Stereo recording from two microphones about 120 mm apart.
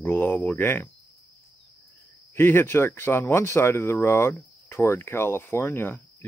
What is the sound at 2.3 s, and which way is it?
Speech, 20° left (ahead or behind).